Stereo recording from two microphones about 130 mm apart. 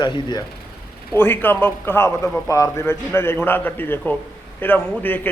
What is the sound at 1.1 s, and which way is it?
A man's voice, 15° left (ahead or behind).